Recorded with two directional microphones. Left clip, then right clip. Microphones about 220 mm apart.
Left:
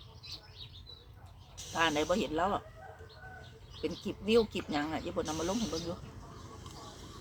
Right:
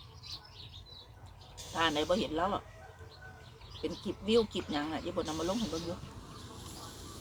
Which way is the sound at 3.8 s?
10° left (ahead or behind).